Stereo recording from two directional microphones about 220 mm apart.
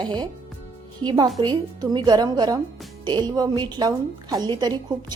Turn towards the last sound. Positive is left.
turn(degrees=-20)  # may be behind; listen again after turning